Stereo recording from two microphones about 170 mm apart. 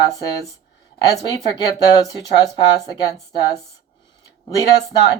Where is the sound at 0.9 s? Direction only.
20° left (ahead or behind).